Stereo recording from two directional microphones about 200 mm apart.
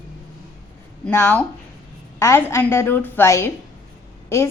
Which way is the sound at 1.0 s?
10° left (ahead or behind).